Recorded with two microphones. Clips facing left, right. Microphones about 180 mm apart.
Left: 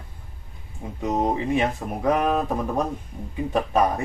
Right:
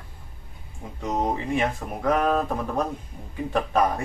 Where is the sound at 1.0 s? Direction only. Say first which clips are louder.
Left 3 dB; 15° left (ahead or behind).